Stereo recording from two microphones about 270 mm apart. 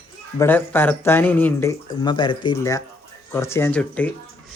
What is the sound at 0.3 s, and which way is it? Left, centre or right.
Speech, centre.